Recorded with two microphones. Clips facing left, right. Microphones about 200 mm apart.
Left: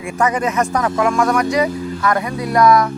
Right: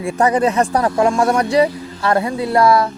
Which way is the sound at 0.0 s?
35° right (ahead or behind).